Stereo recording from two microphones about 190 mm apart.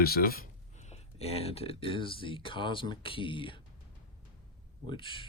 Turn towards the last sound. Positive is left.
turn(degrees=25)  # may be behind; listen again after turning